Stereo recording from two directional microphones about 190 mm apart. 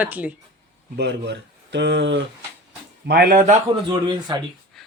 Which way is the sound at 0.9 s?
65° right (ahead or behind).